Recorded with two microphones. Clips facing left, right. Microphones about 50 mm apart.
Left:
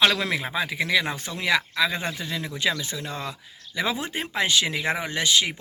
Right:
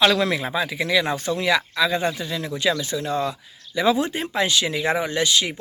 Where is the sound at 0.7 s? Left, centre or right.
Left.